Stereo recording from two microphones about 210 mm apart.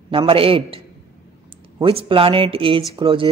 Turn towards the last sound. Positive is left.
turn(degrees=-25)  # may be behind; listen again after turning